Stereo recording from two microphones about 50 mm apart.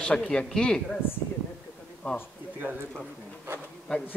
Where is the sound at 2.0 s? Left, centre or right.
Left.